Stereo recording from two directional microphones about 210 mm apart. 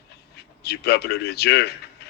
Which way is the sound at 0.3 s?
50° left (ahead or behind).